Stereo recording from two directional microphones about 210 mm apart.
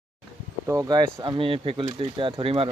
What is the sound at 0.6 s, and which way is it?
Speech, 15° right (ahead or behind).